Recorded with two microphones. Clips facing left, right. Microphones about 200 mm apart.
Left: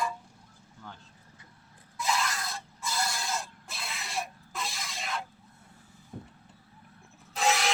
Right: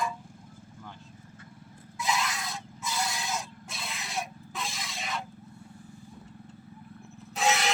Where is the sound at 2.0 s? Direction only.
Centre (ahead or behind).